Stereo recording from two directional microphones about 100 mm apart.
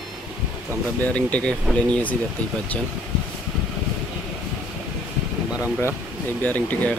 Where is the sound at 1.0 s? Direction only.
15° left (ahead or behind).